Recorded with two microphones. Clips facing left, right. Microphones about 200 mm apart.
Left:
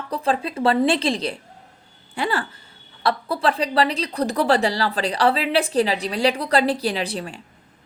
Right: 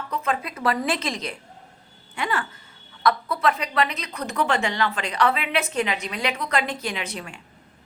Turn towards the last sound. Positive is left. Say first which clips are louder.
# left 6 dB
turn(degrees=35)  # may be behind; listen again after turning